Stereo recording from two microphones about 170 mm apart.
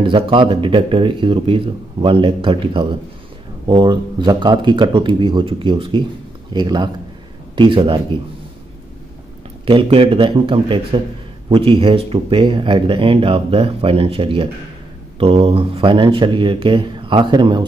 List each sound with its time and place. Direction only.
0.0 s speech: 30° right (ahead or behind)
9.7 s speech: 35° right (ahead or behind)